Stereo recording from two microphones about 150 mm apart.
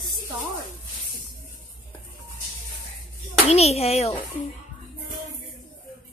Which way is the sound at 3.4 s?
45° left (ahead or behind).